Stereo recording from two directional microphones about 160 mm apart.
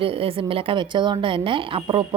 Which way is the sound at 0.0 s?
35° right (ahead or behind).